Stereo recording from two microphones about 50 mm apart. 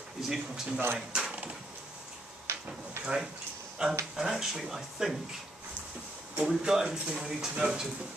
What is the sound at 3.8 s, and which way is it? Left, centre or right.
Speech, centre.